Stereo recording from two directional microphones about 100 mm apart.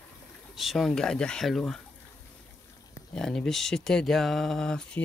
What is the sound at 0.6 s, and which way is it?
Speech, centre (ahead or behind).